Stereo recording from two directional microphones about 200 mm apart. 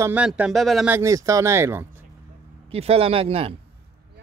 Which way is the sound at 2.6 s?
30° right (ahead or behind).